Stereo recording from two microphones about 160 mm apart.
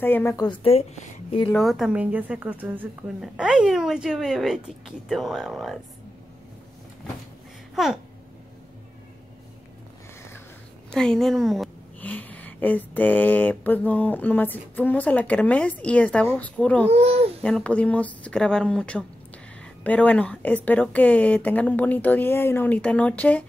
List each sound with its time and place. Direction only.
0.0 s speech: 15° left (ahead or behind)
0.5 s a woman's voice: 35° left (ahead or behind)
1.5 s a woman's voice: centre (ahead or behind)
7.7 s babbling: centre (ahead or behind)
10.9 s speech: 5° left (ahead or behind)
16.9 s a child's voice: 40° right (ahead or behind)
17.4 s speech: 5° left (ahead or behind)